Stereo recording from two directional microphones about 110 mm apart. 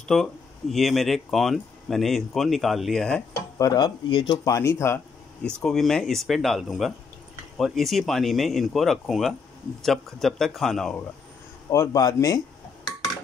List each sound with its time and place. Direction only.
0.1 s speech: centre (ahead or behind)
3.5 s speech: 35° left (ahead or behind)
4.5 s speech: 25° left (ahead or behind)
5.6 s speech: 5° left (ahead or behind)
11.7 s speech: 30° left (ahead or behind)